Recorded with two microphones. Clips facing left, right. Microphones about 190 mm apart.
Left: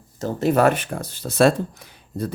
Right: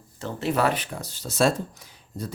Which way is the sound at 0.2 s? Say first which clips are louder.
Left 6 dB; 40° left (ahead or behind).